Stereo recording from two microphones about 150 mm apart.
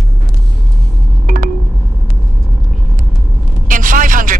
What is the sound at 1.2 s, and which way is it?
Music, 70° right (ahead or behind).